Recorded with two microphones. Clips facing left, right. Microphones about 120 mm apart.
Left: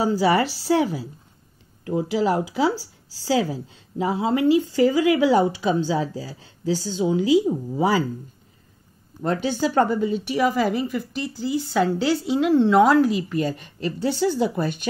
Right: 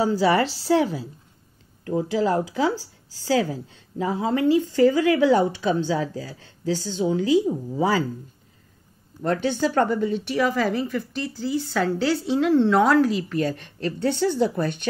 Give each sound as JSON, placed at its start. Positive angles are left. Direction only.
{"t": 0.0, "sound": "a woman's voice", "side_deg": 5}
{"t": 2.7, "sound": "speech", "side_deg": -20}
{"t": 3.3, "sound": "a woman's voice", "side_deg": 15}
{"t": 9.2, "sound": "a woman's voice", "side_deg": 20}